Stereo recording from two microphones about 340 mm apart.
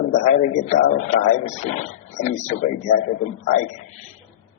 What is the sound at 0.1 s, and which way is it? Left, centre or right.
A man's voice, centre.